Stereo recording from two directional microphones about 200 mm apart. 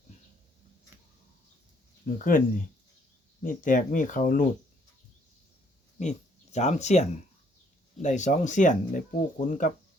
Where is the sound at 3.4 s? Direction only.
40° left (ahead or behind).